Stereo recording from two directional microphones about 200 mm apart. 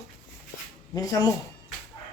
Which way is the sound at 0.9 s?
20° left (ahead or behind).